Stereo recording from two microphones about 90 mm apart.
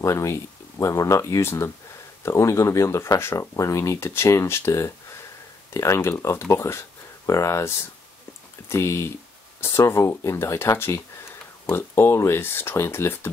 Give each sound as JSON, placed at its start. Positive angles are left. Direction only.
{"t": 0.0, "sound": "speech", "side_deg": 30}